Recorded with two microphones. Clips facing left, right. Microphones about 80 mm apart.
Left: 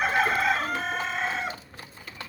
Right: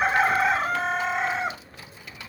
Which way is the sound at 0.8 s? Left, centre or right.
Centre.